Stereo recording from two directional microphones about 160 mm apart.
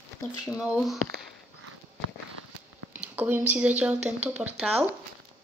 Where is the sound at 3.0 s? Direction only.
10° right (ahead or behind).